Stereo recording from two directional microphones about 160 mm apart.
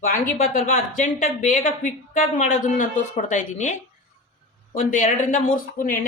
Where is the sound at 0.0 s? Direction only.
60° left (ahead or behind).